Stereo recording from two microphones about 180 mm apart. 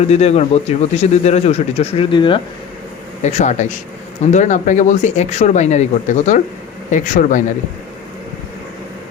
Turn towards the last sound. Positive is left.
turn(degrees=45)  # may be behind; listen again after turning